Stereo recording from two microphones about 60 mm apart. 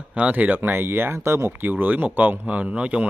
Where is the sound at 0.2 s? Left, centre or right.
Right.